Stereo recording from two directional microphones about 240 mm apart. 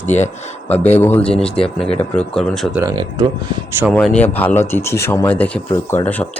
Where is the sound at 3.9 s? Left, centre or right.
Centre.